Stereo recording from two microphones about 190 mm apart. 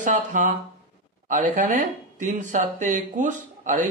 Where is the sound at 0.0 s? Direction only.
40° right (ahead or behind).